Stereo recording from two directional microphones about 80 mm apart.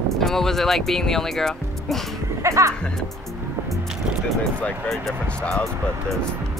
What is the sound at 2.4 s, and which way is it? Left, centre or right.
Speech, right.